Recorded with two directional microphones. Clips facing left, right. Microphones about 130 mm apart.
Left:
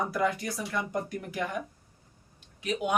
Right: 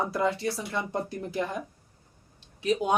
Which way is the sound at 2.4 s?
35° right (ahead or behind).